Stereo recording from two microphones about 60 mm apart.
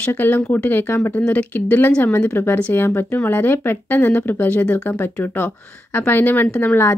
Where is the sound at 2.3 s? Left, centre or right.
Left.